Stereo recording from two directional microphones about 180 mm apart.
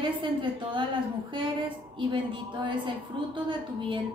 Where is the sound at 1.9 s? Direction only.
25° right (ahead or behind).